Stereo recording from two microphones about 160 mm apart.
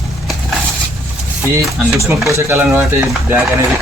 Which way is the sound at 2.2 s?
20° right (ahead or behind).